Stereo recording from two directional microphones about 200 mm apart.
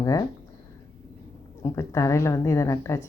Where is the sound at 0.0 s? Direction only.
15° left (ahead or behind).